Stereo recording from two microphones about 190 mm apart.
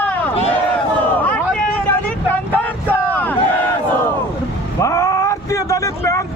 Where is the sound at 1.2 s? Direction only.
10° left (ahead or behind).